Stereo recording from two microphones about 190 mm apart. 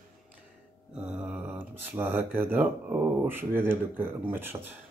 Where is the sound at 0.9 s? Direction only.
5° right (ahead or behind).